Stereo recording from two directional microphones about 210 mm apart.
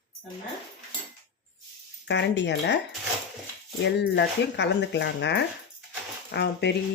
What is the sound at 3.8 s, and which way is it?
Speech, 55° left (ahead or behind).